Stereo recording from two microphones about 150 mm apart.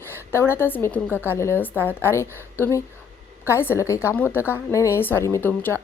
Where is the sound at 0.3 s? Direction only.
15° left (ahead or behind).